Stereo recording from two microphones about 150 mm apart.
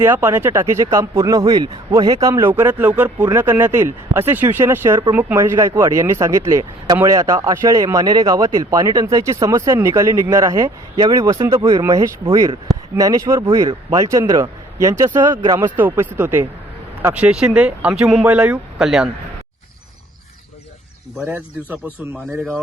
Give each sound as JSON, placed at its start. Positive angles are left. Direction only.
{"t": 0.0, "sound": "speech", "side_deg": -15}
{"t": 21.2, "sound": "speech", "side_deg": -10}